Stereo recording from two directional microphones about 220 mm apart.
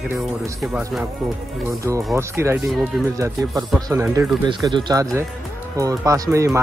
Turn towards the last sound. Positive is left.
turn(degrees=-15)  # may be behind; listen again after turning